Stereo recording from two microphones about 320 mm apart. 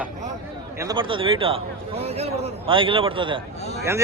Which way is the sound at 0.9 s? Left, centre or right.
Centre.